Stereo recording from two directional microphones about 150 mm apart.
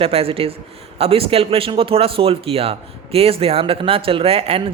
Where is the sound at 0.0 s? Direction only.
40° right (ahead or behind).